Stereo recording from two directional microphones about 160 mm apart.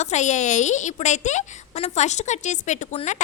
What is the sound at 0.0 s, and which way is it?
A woman's voice, 45° left (ahead or behind).